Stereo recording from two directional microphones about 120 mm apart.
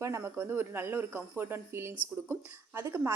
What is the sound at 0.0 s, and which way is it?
A woman's voice, 25° right (ahead or behind).